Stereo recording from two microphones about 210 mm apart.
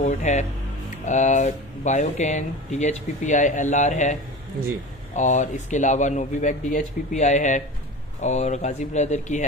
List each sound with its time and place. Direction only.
0.0 s speech: 35° left (ahead or behind)